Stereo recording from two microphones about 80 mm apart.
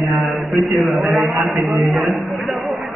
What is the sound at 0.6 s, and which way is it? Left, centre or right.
A man's voice, centre.